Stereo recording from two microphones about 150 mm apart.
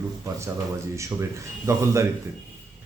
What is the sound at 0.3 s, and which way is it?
Speech, 20° right (ahead or behind).